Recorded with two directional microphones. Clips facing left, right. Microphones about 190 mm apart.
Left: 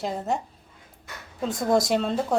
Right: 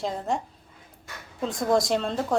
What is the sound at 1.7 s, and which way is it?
Speech, centre (ahead or behind).